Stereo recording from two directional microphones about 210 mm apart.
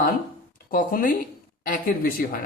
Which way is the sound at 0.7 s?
40° left (ahead or behind).